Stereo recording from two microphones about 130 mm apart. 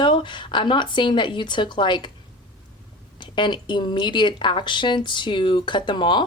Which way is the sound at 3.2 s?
35° left (ahead or behind).